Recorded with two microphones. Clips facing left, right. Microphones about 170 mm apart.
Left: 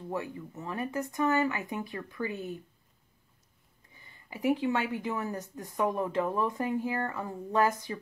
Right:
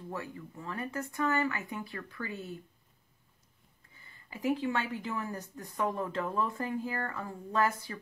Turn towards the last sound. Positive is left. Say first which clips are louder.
# left 3 dB
turn(degrees=20)  # may be behind; listen again after turning